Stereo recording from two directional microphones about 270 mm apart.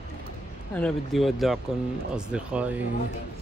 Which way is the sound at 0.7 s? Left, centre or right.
Centre.